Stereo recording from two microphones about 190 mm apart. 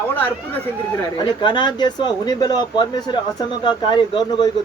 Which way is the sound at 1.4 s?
25° left (ahead or behind).